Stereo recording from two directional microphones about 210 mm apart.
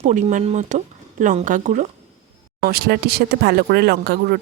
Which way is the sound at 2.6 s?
50° right (ahead or behind).